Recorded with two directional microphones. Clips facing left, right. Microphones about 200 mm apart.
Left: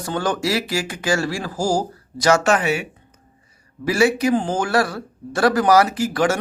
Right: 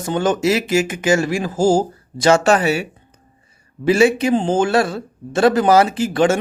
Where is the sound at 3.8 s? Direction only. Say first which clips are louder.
Right 4 dB; 25° right (ahead or behind).